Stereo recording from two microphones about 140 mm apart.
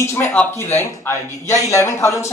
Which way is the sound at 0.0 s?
20° left (ahead or behind).